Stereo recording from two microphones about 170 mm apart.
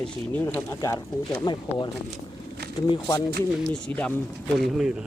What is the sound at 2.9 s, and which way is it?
Speech, 25° left (ahead or behind).